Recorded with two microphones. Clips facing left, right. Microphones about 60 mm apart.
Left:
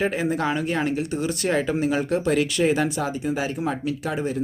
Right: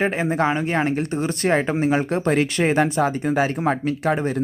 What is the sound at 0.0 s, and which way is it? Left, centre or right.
Speech, right.